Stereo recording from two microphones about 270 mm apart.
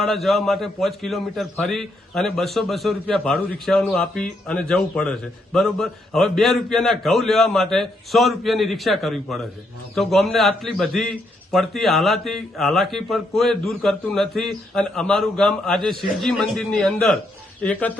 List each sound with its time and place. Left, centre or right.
0.0 s a man's voice: centre